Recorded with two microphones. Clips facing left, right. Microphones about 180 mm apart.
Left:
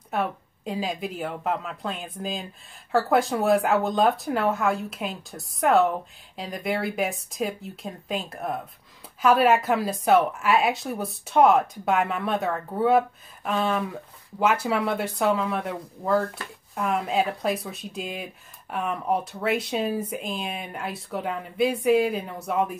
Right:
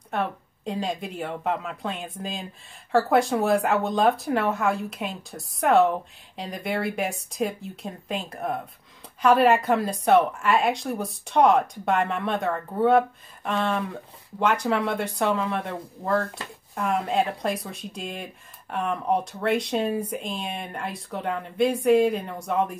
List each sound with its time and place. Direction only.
0.1 s speech: 5° left (ahead or behind)